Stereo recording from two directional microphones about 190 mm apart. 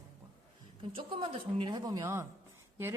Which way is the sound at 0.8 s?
25° right (ahead or behind).